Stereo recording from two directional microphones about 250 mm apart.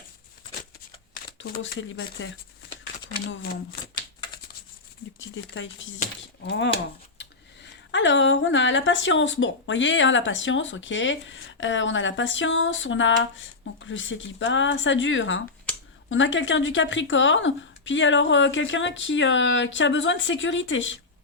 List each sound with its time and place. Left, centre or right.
1.4 s speech: left
5.2 s speech: left